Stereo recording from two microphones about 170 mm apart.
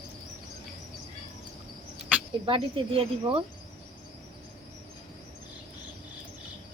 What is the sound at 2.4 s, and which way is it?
Speech, 30° right (ahead or behind).